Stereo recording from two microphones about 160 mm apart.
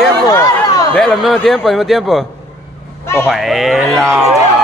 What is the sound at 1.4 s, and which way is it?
Speech, centre (ahead or behind).